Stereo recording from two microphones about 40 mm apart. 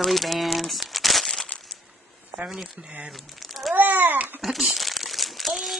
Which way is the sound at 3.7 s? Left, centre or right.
Right.